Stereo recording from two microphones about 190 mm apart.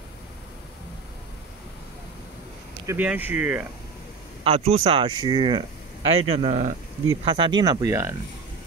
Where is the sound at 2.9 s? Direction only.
10° right (ahead or behind).